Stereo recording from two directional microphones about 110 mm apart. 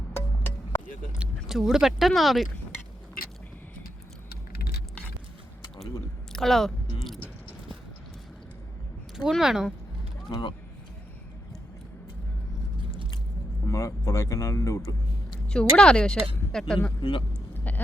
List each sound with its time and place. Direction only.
1.5 s speech: 5° right (ahead or behind)
6.3 s speech: centre (ahead or behind)
9.3 s speech: 5° right (ahead or behind)
10.2 s speech: 45° left (ahead or behind)
13.7 s speech: 30° left (ahead or behind)
15.4 s speech: 5° left (ahead or behind)
17.0 s a man's voice: 50° left (ahead or behind)
17.3 s a sound: 15° left (ahead or behind)